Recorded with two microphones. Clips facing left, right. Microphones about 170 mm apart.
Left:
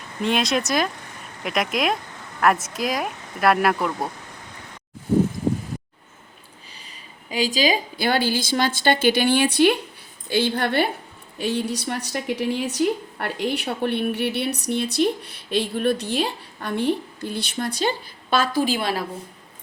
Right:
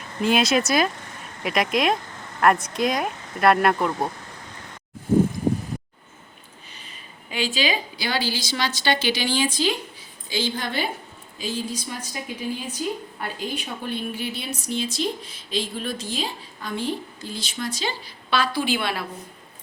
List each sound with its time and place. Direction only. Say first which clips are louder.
0.2 s speech: right 2 dB; 5° right (ahead or behind)
7.3 s a woman's voice: left 4 dB; 40° left (ahead or behind)